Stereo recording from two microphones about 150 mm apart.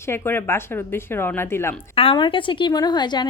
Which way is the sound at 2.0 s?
35° left (ahead or behind).